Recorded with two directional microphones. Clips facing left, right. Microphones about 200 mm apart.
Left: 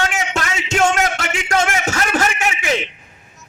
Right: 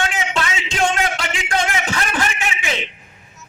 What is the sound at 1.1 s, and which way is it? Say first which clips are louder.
Speech: left 3 dB; 45° left (ahead or behind).